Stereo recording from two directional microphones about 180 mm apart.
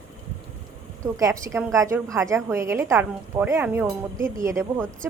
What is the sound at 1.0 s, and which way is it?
A woman's voice, 20° right (ahead or behind).